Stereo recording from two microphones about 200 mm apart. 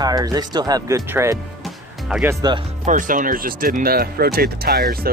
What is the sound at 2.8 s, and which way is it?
Speech, 40° right (ahead or behind).